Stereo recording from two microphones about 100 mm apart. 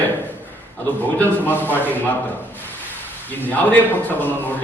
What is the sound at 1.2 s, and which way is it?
Speech, 20° left (ahead or behind).